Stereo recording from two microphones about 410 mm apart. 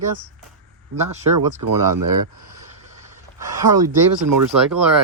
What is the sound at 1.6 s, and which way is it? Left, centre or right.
Speech, right.